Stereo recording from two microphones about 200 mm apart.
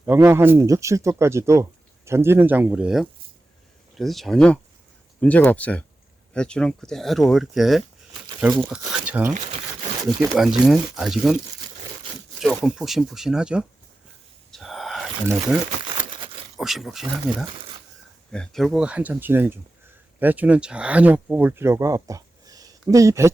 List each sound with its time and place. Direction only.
0.0 s speech: 15° right (ahead or behind)
10.3 s speech: centre (ahead or behind)
12.4 s speech: centre (ahead or behind)
14.5 s wheeze: centre (ahead or behind)
15.8 s crumpling: 25° right (ahead or behind)
16.6 s speech: centre (ahead or behind)
18.3 s speech: centre (ahead or behind); by 23.3 s 15° right (ahead or behind)